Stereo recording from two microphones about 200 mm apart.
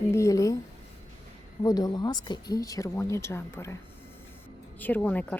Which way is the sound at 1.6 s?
20° left (ahead or behind).